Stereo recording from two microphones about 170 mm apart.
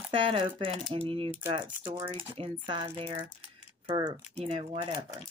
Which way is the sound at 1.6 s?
15° right (ahead or behind).